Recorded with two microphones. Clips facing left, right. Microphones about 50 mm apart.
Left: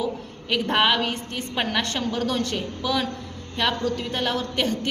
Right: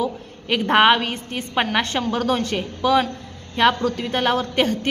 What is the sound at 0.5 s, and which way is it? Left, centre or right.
A woman's voice, right.